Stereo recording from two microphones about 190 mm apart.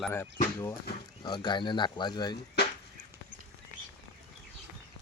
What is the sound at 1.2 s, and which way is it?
Speech, 25° left (ahead or behind).